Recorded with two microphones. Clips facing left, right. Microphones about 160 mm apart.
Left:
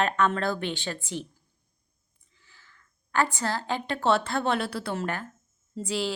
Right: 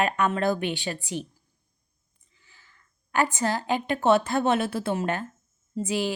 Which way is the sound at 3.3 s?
15° right (ahead or behind).